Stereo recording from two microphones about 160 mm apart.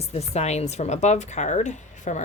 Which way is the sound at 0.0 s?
40° left (ahead or behind).